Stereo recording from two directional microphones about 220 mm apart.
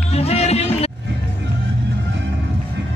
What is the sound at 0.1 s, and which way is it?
Music, 30° left (ahead or behind).